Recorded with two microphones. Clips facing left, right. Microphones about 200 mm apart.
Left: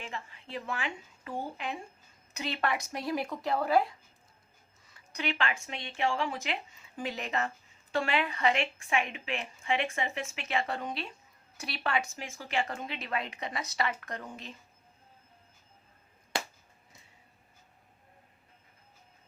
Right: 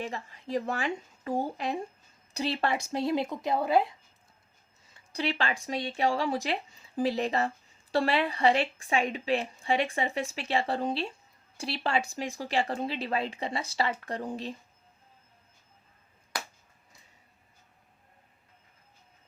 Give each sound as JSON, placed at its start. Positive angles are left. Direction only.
{"t": 0.0, "sound": "a woman's voice", "side_deg": -40}
{"t": 4.9, "sound": "a woman's voice", "side_deg": -35}
{"t": 16.3, "sound": "a sound", "side_deg": 25}